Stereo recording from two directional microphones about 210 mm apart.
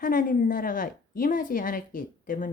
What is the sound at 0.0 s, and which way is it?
A woman's voice, 40° left (ahead or behind).